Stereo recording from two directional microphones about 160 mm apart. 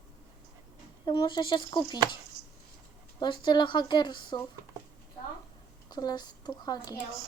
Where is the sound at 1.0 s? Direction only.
30° left (ahead or behind).